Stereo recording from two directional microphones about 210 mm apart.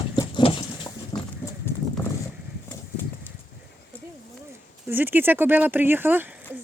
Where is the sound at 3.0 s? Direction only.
10° left (ahead or behind).